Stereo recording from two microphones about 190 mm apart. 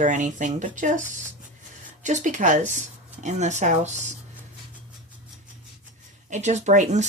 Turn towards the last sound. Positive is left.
turn(degrees=-40)  # may be behind; listen again after turning